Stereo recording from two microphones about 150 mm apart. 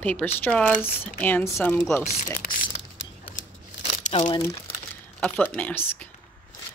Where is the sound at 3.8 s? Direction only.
45° left (ahead or behind).